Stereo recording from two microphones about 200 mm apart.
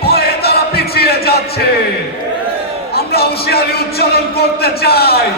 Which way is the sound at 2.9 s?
50° left (ahead or behind).